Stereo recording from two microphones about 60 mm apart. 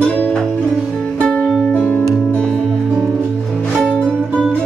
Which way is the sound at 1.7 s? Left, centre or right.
Left.